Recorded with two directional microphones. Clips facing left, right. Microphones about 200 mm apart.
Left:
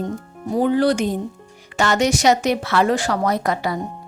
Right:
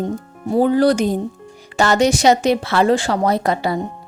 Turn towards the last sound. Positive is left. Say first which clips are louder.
# right 3 dB
turn(degrees=-30)  # may be behind; listen again after turning